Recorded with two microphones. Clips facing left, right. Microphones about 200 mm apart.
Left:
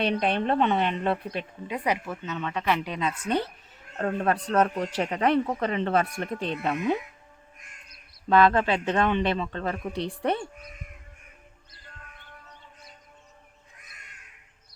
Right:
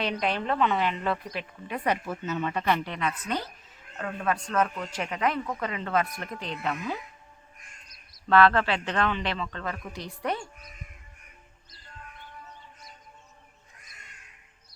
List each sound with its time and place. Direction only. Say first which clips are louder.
0.0 s speech: left 4 dB; 25° left (ahead or behind)
2.0 s speech: right 2 dB; 5° right (ahead or behind)
2.8 s speech: left 2 dB; 20° left (ahead or behind)
3.9 s speech: left 4 dB; 40° left (ahead or behind)
6.4 s speech: left 5 dB; 60° left (ahead or behind)
6.7 s speech: left 6 dB; 25° left (ahead or behind)
8.3 s speech: left 1 dB; 15° left (ahead or behind)